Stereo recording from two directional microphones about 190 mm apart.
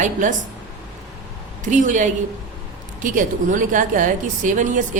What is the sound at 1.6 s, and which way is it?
A woman's voice, 40° right (ahead or behind).